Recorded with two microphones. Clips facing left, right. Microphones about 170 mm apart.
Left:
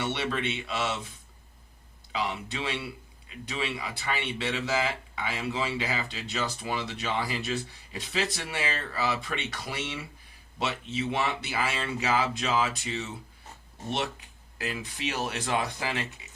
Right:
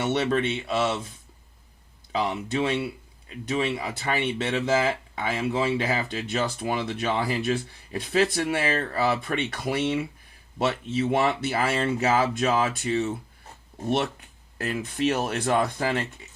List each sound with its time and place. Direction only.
0.0 s speech: 45° right (ahead or behind)
2.1 s speech: 50° right (ahead or behind)